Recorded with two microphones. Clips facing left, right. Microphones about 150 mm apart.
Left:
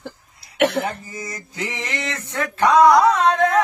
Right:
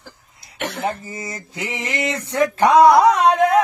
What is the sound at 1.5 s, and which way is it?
Singing, 10° right (ahead or behind).